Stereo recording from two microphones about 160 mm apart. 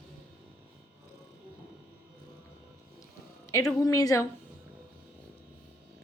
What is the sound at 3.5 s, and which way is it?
Speech, 20° left (ahead or behind).